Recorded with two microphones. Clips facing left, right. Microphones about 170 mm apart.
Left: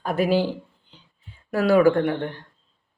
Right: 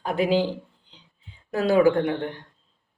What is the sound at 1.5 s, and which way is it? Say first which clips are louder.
Speech: left 2 dB; 20° right (ahead or behind).